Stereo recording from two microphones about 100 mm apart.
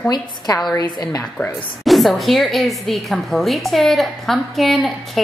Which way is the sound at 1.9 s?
Centre (ahead or behind).